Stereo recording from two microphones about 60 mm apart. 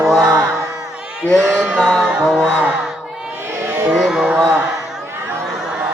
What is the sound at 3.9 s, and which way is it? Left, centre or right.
Speech, centre.